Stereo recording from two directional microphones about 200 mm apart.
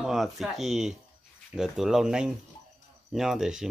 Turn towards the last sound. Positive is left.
turn(degrees=0)  # may be behind; listen again after turning